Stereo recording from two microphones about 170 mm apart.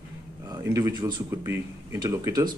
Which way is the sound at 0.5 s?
20° right (ahead or behind).